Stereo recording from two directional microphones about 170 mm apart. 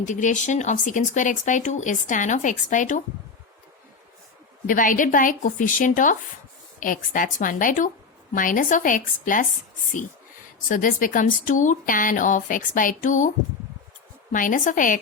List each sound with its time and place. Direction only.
0.0 s speech: 45° left (ahead or behind)
4.6 s speech: 50° left (ahead or behind)
10.7 s speech: 50° left (ahead or behind)
14.3 s speech: 50° left (ahead or behind)